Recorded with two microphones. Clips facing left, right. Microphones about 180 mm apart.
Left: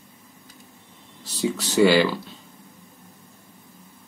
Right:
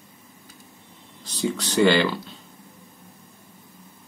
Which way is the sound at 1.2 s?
5° left (ahead or behind).